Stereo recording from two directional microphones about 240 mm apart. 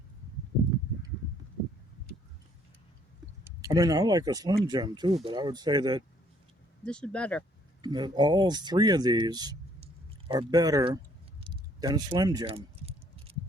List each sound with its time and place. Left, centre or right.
3.4 s speech: centre
6.8 s speech: centre
7.8 s speech: centre
11.4 s a sound: centre